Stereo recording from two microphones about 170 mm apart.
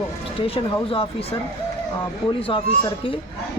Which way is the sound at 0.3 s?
35° left (ahead or behind).